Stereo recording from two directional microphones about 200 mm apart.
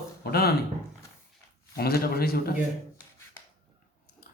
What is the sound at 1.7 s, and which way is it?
Speech, 50° left (ahead or behind).